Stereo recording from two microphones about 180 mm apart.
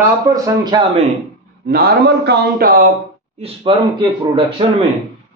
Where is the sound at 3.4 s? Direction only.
30° right (ahead or behind).